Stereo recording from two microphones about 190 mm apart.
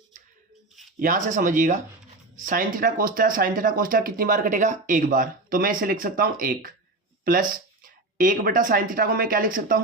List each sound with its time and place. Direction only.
0.9 s speech: 45° right (ahead or behind)